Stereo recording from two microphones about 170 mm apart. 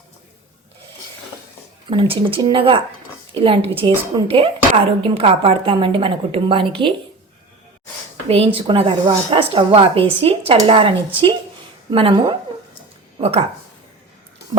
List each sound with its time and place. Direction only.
1.9 s a woman's voice: 30° right (ahead or behind)
8.5 s a woman's voice: 35° right (ahead or behind)